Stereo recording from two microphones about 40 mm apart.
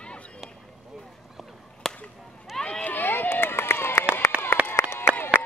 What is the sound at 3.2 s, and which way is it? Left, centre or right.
Run, left.